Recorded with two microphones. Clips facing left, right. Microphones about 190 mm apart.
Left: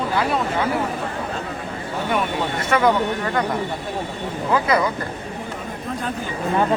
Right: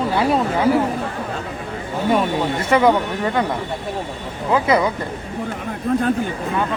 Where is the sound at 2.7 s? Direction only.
25° right (ahead or behind).